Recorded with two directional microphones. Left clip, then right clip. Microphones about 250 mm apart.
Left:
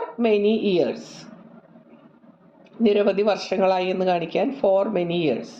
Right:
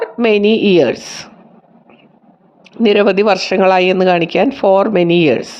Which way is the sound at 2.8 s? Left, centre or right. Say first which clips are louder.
Right 8 dB; right.